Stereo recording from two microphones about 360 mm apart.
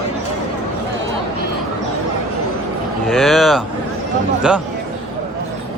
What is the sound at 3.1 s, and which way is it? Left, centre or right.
Speech, centre.